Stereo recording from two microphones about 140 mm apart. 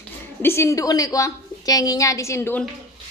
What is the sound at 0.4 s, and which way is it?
A woman's voice, 20° left (ahead or behind).